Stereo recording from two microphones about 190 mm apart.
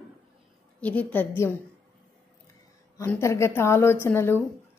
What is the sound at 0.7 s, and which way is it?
Speech, 5° left (ahead or behind).